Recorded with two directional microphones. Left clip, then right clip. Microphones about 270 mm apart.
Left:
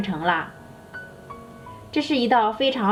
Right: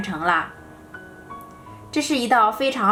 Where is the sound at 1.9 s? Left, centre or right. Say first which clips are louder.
Right 1 dB; right.